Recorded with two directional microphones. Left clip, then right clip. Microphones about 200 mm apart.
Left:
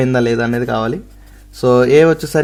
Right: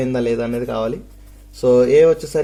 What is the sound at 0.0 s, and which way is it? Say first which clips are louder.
Speech: left 5 dB; 55° left (ahead or behind).